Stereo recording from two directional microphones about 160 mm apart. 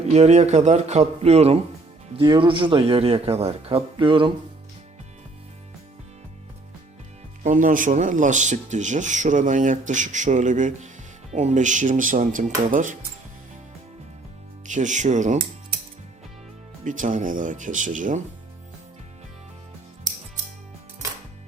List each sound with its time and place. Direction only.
0.0 s speech: 45° right (ahead or behind)
7.4 s speech: 55° right (ahead or behind)
14.7 s speech: 50° right (ahead or behind)
16.8 s speech: 55° right (ahead or behind)